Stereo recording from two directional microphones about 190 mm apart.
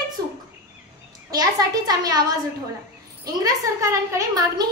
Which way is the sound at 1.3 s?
20° right (ahead or behind).